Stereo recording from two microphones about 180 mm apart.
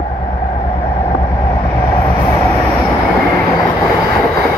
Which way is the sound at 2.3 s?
15° left (ahead or behind).